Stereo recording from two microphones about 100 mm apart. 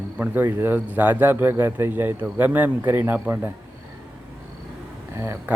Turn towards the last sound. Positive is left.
turn(degrees=-25)  # may be behind; listen again after turning